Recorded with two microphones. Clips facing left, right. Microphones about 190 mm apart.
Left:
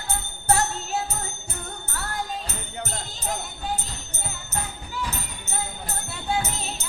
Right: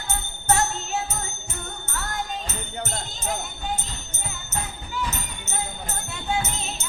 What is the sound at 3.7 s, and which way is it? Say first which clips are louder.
Music: left 1 dB; 35° left (ahead or behind).